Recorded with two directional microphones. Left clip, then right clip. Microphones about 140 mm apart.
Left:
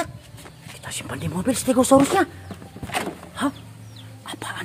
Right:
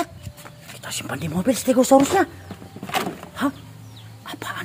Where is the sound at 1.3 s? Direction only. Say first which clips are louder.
Right 2 dB; 10° right (ahead or behind).